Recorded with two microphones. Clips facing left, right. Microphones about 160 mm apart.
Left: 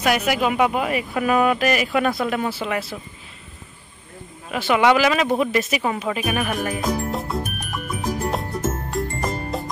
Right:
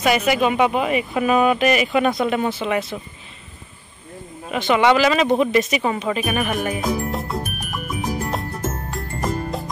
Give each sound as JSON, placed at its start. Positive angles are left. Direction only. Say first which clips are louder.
{"t": 0.0, "sound": "speech", "louder": "right 2 dB", "side_deg": 0}
{"t": 4.5, "sound": "speech", "louder": "right 1 dB", "side_deg": 5}
{"t": 8.3, "sound": "music", "louder": "left 1 dB", "side_deg": 0}